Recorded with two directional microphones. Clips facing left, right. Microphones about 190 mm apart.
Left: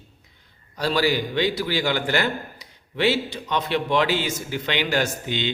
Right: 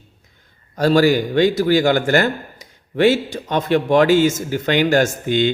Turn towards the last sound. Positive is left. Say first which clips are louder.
# right 8 dB
turn(degrees=-50)  # may be behind; listen again after turning